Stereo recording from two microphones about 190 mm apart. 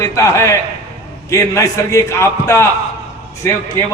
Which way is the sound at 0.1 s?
15° left (ahead or behind).